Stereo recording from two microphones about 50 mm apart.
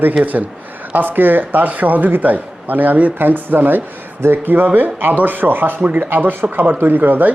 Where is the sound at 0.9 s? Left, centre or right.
Right.